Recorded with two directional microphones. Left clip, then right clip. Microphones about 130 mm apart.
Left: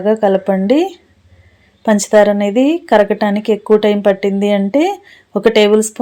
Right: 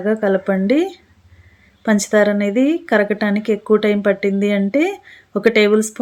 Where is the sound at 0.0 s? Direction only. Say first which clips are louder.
Left 5 dB; 15° left (ahead or behind).